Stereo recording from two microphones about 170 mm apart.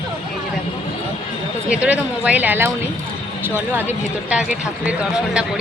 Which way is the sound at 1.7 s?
10° right (ahead or behind).